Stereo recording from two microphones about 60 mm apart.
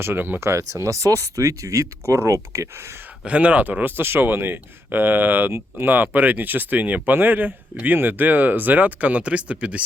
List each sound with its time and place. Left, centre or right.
0.0 s speech: right
0.3 s speech: right
3.2 s speech: right